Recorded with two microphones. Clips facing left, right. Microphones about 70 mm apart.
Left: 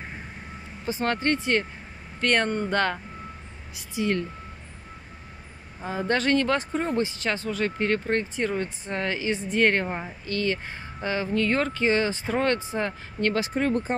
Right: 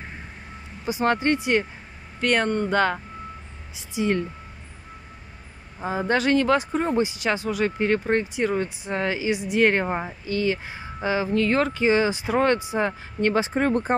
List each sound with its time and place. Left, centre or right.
0.8 s speech: centre
2.1 s speech: centre
3.7 s speech: right
5.9 s speech: centre